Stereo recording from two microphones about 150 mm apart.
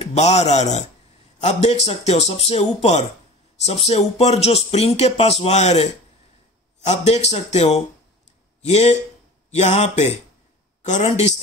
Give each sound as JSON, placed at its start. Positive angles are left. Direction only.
{"t": 0.0, "sound": "speech", "side_deg": 45}